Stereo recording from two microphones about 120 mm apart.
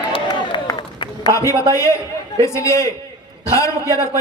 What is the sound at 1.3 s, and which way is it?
A man's voice, 25° left (ahead or behind).